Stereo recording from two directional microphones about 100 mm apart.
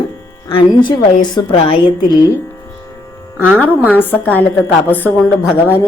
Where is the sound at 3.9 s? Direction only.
20° left (ahead or behind).